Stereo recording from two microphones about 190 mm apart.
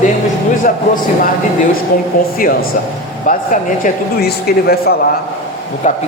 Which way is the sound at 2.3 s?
50° left (ahead or behind).